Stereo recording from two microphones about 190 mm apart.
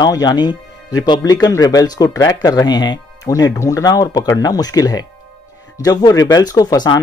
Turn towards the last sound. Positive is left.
turn(degrees=20)  # may be behind; listen again after turning